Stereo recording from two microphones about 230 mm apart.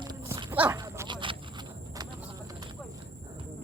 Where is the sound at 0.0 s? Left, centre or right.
Centre.